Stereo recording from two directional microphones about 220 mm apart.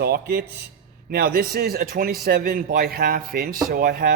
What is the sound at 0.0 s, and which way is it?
A man's voice, 45° right (ahead or behind).